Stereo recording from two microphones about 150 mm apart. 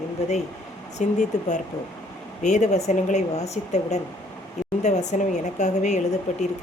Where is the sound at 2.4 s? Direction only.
50° left (ahead or behind).